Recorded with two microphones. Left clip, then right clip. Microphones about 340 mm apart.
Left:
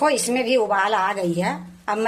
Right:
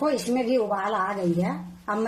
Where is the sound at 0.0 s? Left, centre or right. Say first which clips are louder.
Left 5 dB; left.